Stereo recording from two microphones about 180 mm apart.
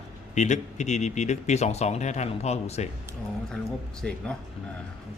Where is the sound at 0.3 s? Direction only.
40° left (ahead or behind).